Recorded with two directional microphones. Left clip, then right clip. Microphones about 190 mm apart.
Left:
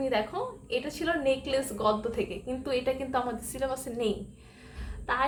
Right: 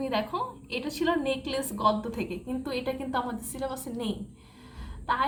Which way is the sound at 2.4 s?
10° left (ahead or behind).